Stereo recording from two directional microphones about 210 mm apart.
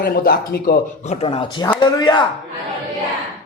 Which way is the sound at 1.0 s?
25° left (ahead or behind).